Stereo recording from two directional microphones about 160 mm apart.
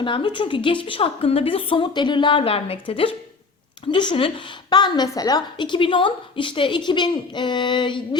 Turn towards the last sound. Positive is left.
turn(degrees=30)  # may be behind; listen again after turning